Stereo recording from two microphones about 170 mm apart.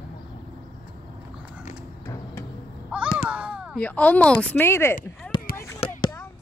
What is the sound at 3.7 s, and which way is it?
A woman's voice, 10° left (ahead or behind).